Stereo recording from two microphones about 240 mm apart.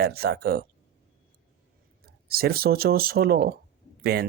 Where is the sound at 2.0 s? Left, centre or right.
Right.